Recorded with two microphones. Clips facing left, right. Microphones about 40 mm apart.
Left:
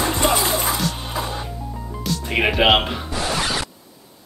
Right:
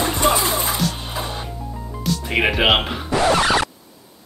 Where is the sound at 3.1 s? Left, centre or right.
Right.